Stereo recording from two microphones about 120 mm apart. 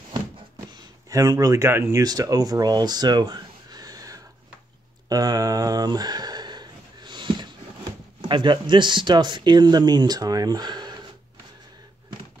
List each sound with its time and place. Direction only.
1.0 s speech: 30° right (ahead or behind)
5.1 s a sound: 30° right (ahead or behind)
8.2 s speech: 40° right (ahead or behind)